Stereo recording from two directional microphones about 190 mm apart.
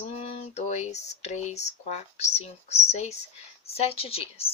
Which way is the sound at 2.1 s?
35° left (ahead or behind).